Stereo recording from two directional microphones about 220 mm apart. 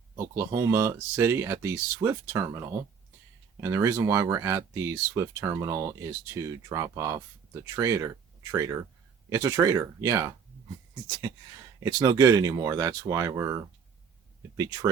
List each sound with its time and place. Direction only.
0.2 s speech: 15° right (ahead or behind)
11.8 s speech: 15° right (ahead or behind)